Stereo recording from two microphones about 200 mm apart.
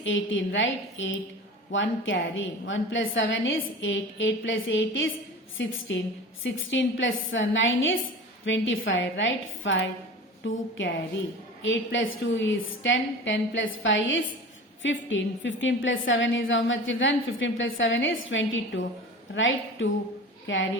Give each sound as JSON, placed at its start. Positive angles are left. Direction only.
{"t": 0.0, "sound": "a woman's voice", "side_deg": 70}